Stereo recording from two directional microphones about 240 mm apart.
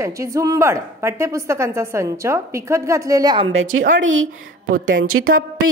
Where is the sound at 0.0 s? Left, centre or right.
Centre.